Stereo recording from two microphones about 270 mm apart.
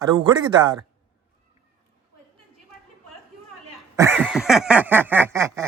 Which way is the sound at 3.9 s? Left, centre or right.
Centre.